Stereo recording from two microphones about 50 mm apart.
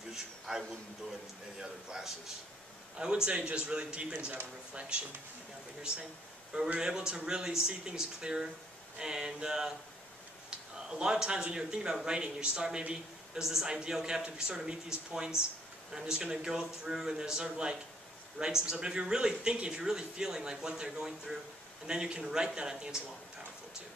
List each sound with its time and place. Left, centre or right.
0.1 s a man's voice: centre
3.3 s speech: right
6.8 s speech: centre
10.9 s speech: centre